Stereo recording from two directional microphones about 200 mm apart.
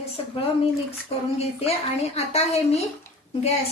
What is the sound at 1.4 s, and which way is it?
A woman's voice, 30° left (ahead or behind).